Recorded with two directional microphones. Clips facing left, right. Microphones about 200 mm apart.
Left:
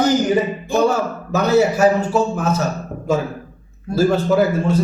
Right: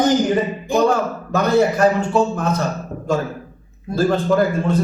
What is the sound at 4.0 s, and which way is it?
Speech, 5° left (ahead or behind).